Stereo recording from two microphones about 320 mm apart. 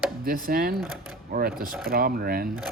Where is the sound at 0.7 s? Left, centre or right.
Centre.